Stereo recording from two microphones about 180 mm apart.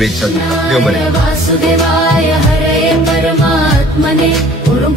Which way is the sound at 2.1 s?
Centre (ahead or behind).